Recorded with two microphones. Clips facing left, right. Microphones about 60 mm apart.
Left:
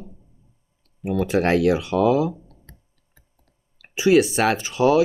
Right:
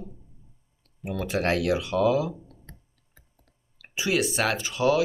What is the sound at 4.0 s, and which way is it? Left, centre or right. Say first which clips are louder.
Speech: left 8 dB; left.